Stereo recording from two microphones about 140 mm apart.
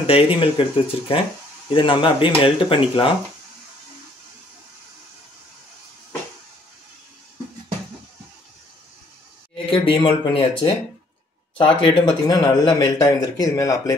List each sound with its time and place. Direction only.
0.0 s speech: 40° left (ahead or behind)
9.7 s speech: 40° left (ahead or behind)